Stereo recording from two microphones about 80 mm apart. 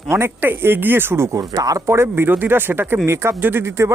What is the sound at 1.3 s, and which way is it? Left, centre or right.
Speech, right.